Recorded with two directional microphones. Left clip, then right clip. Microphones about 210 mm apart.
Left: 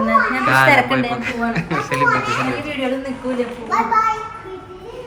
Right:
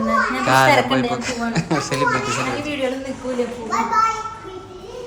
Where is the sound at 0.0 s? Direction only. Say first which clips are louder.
Left 3 dB; 5° right (ahead or behind).